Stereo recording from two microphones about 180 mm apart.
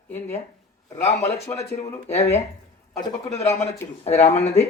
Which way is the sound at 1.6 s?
35° left (ahead or behind).